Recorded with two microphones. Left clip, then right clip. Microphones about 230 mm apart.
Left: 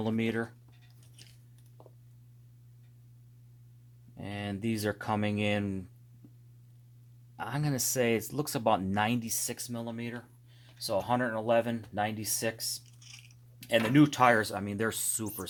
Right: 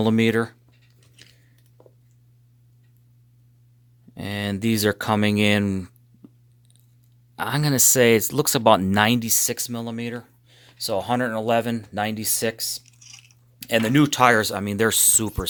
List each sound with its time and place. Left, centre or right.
0.0 s speech: right
4.2 s speech: right
7.3 s speech: right
13.0 s chewing: centre
13.6 s speech: right